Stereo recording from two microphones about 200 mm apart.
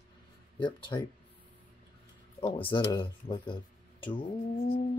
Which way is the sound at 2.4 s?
25° left (ahead or behind).